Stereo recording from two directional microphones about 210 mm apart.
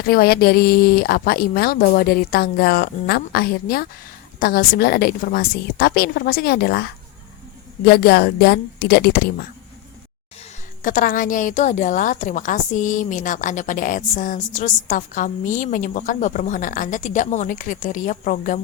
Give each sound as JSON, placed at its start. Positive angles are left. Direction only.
{"t": 0.0, "sound": "speech", "side_deg": 45}
{"t": 10.8, "sound": "a woman's voice", "side_deg": 40}